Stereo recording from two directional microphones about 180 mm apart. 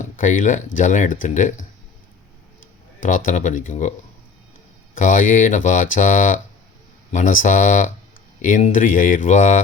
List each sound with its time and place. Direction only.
0.0 s speech: 45° left (ahead or behind)
3.2 s speech: 45° left (ahead or behind)
4.9 s speech: 45° left (ahead or behind)